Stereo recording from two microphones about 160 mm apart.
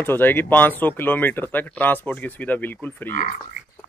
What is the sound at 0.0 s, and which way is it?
Speech, 15° left (ahead or behind).